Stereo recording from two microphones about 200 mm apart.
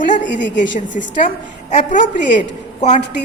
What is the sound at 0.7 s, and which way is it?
A woman's voice, 40° left (ahead or behind).